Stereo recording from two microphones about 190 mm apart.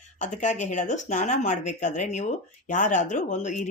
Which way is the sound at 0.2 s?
40° left (ahead or behind).